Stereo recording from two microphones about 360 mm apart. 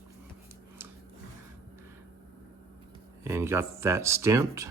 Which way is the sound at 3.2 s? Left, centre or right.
Centre.